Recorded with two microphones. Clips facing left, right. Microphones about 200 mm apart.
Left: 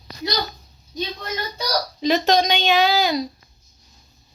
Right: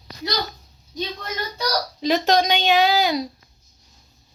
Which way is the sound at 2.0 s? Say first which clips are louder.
Left 1 dB; 10° right (ahead or behind).